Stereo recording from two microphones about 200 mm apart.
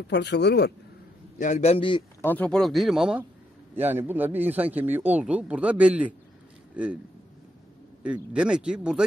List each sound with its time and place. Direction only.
0.1 s speech: 55° left (ahead or behind)
1.4 s a man's voice: 35° left (ahead or behind)
2.2 s a man's voice: 5° left (ahead or behind)
8.0 s speech: 5° right (ahead or behind)